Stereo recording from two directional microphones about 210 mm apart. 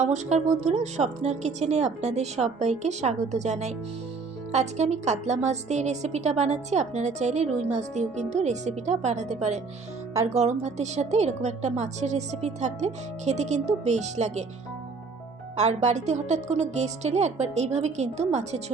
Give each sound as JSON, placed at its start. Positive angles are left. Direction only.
{"t": 0.0, "sound": "a woman's voice", "side_deg": -35}
{"t": 15.5, "sound": "a woman's voice", "side_deg": -35}